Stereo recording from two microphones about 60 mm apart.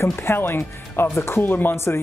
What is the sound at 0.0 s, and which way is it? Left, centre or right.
Speech, left.